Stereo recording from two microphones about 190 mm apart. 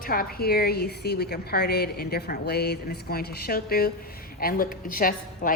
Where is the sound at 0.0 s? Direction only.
50° left (ahead or behind).